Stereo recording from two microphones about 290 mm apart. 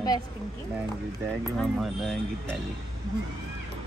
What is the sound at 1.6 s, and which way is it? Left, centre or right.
Speech, centre.